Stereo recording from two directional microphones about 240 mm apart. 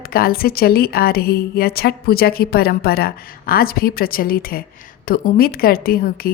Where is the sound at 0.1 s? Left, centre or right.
Left.